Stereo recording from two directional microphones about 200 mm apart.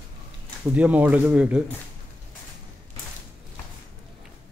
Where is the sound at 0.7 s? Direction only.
5° right (ahead or behind).